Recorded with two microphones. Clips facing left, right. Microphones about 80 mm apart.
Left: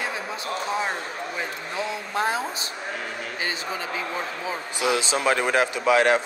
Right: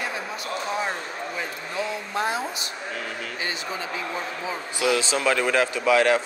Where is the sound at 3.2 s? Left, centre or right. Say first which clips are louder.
Left 1 dB; left.